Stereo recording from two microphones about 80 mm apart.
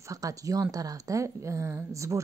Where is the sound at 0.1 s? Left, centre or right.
Right.